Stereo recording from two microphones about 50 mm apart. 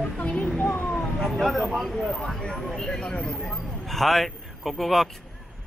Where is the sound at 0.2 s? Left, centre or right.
Left.